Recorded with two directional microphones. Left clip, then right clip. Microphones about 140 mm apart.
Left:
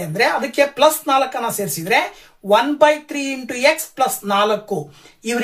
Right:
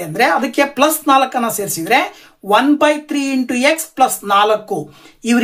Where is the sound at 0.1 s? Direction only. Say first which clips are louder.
Right 4 dB; 40° right (ahead or behind).